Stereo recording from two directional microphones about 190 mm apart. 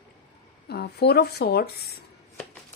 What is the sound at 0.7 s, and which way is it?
Speech, 60° left (ahead or behind).